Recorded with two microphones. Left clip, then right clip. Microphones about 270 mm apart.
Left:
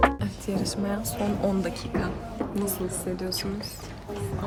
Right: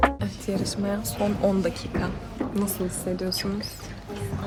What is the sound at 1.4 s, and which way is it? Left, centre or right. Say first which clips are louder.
Speech: right 4 dB; centre.